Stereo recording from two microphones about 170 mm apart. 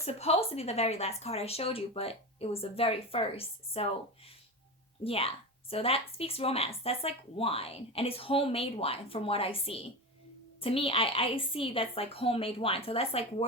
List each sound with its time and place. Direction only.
0.0 s speech: 40° left (ahead or behind)
5.0 s speech: 35° left (ahead or behind)